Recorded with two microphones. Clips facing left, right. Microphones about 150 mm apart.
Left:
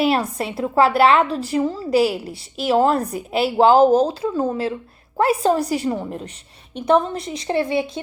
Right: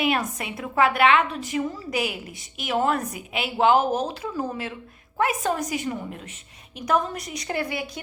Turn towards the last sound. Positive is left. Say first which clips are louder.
# left 8 dB
turn(degrees=25)  # may be behind; listen again after turning